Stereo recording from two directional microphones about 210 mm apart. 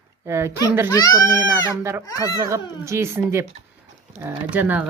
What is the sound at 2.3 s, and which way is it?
A woman's voice, 15° right (ahead or behind).